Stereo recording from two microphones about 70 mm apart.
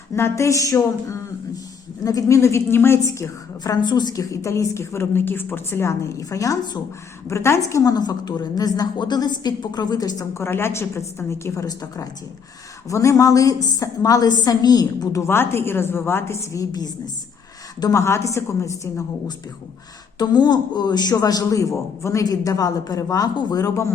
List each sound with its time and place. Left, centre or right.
0.1 s a woman's voice: left
3.0 s a woman's voice: left
3.6 s a woman's voice: left
4.1 s a woman's voice: left
7.9 s a woman's voice: left
10.3 s a woman's voice: left
11.6 s a man's voice: left
15.3 s a woman's voice: left
17.9 s a woman's voice: left
20.1 s a man's voice: left